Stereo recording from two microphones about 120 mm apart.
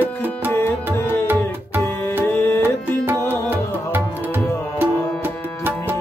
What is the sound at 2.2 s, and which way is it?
Tabla, 20° left (ahead or behind).